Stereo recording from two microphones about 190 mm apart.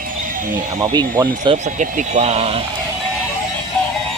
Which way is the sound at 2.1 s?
35° right (ahead or behind).